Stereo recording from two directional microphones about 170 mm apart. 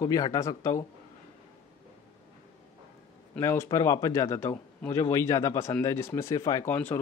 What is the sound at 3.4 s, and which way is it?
Speech, 20° left (ahead or behind).